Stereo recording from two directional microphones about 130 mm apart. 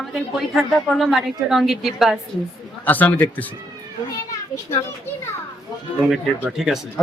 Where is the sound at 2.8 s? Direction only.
15° left (ahead or behind).